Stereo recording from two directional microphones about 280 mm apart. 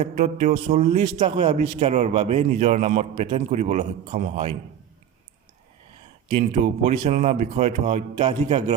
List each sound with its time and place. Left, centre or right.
0.0 s a man's voice: right
6.2 s a man's voice: right